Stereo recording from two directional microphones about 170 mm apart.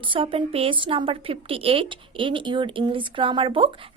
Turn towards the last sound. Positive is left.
turn(degrees=-30)  # may be behind; listen again after turning